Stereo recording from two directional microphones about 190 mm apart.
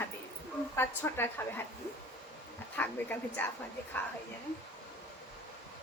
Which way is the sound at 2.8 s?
10° left (ahead or behind).